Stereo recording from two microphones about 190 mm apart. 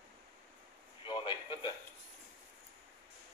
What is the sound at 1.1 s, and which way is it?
Speech, 25° left (ahead or behind).